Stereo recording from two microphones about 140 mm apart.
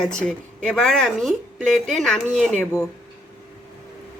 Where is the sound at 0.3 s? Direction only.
5° left (ahead or behind).